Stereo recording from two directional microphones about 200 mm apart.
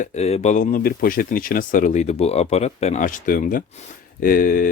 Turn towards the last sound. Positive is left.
turn(degrees=45)  # may be behind; listen again after turning